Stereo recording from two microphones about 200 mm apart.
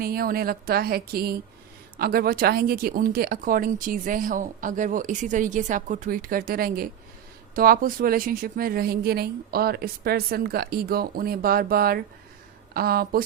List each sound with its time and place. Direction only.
0.0 s speech: 45° right (ahead or behind)